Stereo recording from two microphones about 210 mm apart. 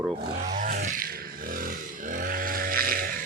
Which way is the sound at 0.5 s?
40° right (ahead or behind).